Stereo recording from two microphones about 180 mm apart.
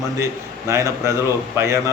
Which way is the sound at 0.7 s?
15° right (ahead or behind).